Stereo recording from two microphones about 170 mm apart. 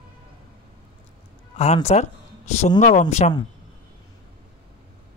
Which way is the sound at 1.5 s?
40° left (ahead or behind).